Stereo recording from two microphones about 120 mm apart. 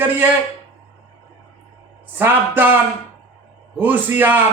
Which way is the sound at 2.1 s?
15° right (ahead or behind).